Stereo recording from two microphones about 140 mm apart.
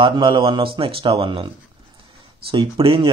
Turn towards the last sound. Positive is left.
turn(degrees=-40)  # may be behind; listen again after turning